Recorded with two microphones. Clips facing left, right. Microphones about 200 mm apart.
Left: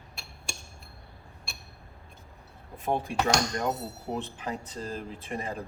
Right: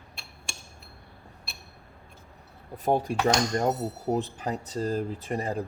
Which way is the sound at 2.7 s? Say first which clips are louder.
Right 4 dB; 40° right (ahead or behind).